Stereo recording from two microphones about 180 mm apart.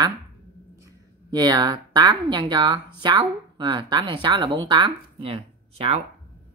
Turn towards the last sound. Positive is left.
turn(degrees=-30)  # may be behind; listen again after turning